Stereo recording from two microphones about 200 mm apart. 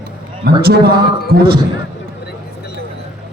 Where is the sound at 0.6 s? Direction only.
50° right (ahead or behind).